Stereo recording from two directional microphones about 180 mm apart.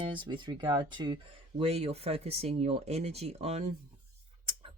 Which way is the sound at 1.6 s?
35° right (ahead or behind).